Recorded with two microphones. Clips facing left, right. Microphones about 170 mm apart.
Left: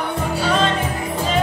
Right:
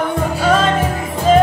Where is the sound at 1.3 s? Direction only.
45° right (ahead or behind).